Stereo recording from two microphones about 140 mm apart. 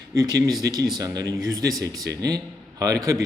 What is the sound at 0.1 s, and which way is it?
A man's voice, 25° right (ahead or behind).